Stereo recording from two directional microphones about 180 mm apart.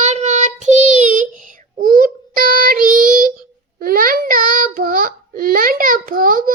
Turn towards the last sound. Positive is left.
turn(degrees=-50)  # may be behind; listen again after turning